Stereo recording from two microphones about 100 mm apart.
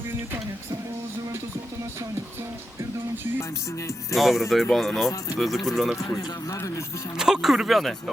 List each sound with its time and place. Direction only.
3.7 s speech: 30° left (ahead or behind)
4.1 s speech: centre (ahead or behind)
6.0 s speech: 30° left (ahead or behind)
7.2 s speech: 5° right (ahead or behind)